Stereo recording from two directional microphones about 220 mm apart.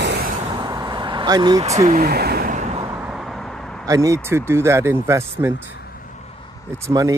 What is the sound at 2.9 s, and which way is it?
Vehicle, 5° right (ahead or behind).